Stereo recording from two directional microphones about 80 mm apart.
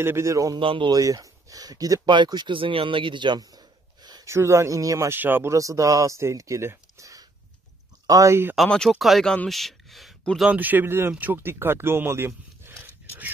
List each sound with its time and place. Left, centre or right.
0.0 s speech: right
0.6 s speech: right
0.9 s speech: right
2.0 s speech: right
3.3 s a sound: right
4.3 s speech: right
5.2 s speech: right
5.5 s speech: right
8.1 s speech: right
8.6 s speech: centre
10.5 s speech: right
12.6 s a sound: right